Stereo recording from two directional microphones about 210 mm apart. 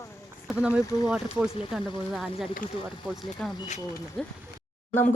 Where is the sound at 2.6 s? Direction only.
40° left (ahead or behind).